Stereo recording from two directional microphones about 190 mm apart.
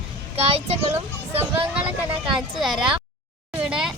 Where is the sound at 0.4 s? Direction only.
30° right (ahead or behind).